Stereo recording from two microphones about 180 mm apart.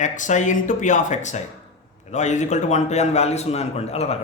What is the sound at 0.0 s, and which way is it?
A man's voice, 45° left (ahead or behind).